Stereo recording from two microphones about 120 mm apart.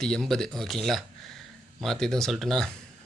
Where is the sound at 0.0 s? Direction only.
5° left (ahead or behind).